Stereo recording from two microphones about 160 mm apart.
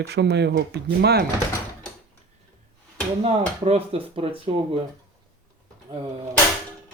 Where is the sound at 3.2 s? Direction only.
40° right (ahead or behind).